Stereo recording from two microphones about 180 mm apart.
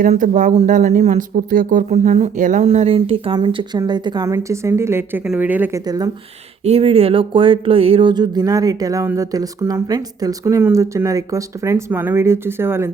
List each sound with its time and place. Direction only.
0.0 s speech: 45° right (ahead or behind); by 5.8 s 10° right (ahead or behind)
6.7 s speech: 35° right (ahead or behind); by 12.9 s 15° right (ahead or behind)